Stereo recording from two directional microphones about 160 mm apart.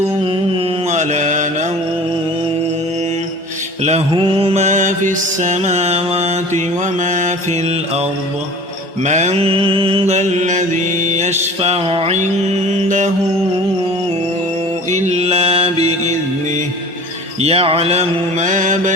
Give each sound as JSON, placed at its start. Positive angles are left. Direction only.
{"t": 0.9, "sound": "mantra", "side_deg": -50}
{"t": 4.1, "sound": "mantra", "side_deg": -35}
{"t": 9.0, "sound": "mantra", "side_deg": -45}
{"t": 14.8, "sound": "mantra", "side_deg": -45}
{"t": 17.4, "sound": "mantra", "side_deg": -40}